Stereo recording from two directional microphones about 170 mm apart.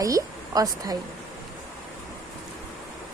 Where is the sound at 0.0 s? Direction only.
20° right (ahead or behind).